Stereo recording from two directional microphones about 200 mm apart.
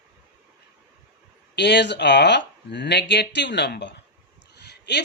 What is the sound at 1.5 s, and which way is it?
Speech, 60° left (ahead or behind).